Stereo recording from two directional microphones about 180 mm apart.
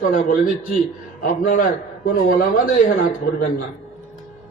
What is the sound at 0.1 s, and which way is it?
A man's voice, 50° left (ahead or behind).